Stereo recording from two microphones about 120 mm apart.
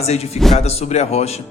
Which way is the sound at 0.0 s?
60° left (ahead or behind).